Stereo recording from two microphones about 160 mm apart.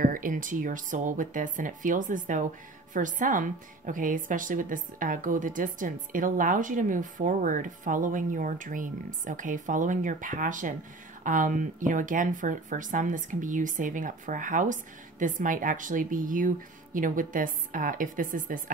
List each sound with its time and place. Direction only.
0.0 s a woman's voice: 55° right (ahead or behind)